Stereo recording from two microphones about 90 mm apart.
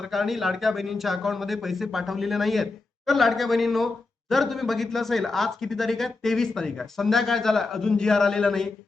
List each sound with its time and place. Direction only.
0.0 s speech: centre (ahead or behind)